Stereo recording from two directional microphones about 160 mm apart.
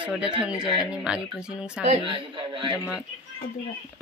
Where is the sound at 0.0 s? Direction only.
5° right (ahead or behind).